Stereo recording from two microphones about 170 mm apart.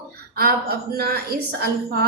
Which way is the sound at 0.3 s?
65° right (ahead or behind).